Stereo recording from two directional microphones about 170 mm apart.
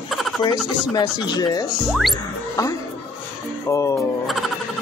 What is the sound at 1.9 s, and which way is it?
Speech, centre (ahead or behind).